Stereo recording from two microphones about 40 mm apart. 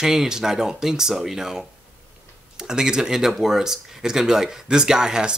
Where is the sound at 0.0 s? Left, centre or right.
Centre.